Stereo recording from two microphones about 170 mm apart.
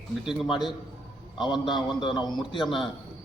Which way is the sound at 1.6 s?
30° left (ahead or behind).